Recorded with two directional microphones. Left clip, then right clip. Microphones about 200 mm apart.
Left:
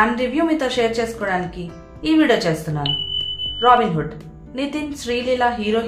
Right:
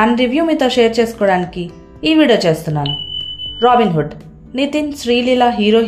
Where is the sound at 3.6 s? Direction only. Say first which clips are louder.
Right 3 dB; 30° right (ahead or behind).